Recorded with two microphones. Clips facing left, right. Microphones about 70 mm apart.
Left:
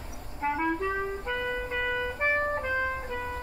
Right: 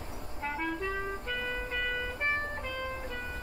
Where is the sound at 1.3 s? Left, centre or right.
Centre.